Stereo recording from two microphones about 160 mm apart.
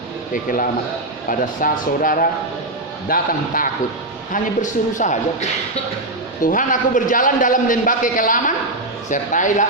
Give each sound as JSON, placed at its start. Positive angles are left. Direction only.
{"t": 1.3, "sound": "a man's voice", "side_deg": 60}